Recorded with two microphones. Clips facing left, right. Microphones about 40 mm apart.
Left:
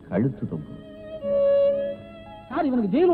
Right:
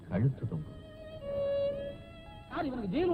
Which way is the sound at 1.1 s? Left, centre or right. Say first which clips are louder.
Left 13 dB; left.